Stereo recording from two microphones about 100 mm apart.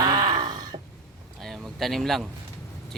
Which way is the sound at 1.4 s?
Centre (ahead or behind).